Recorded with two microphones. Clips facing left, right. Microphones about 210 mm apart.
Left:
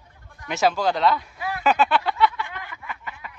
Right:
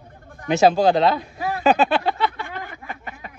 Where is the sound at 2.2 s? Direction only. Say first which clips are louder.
Left 1 dB; 45° right (ahead or behind).